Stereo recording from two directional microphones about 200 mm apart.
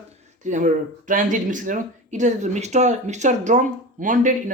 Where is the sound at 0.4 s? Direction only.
40° right (ahead or behind).